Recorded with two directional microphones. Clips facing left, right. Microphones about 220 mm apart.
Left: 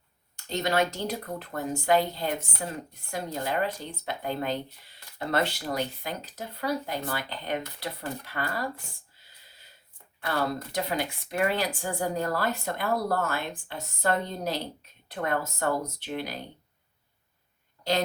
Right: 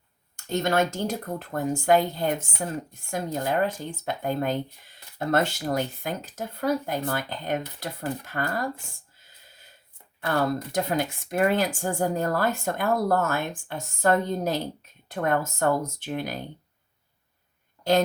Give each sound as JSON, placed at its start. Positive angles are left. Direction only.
{"t": 0.3, "sound": "speech", "side_deg": -50}